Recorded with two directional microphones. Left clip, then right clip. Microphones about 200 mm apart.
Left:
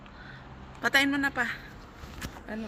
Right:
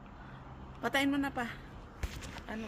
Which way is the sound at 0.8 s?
15° right (ahead or behind).